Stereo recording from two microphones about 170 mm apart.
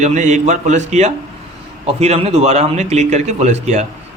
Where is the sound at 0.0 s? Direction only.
45° right (ahead or behind).